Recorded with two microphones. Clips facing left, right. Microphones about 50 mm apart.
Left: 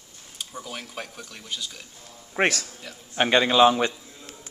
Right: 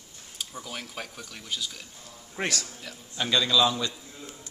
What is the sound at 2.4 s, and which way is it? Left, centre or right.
A man's voice, left.